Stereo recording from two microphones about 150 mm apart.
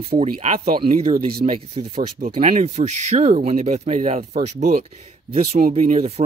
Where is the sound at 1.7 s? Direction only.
45° right (ahead or behind).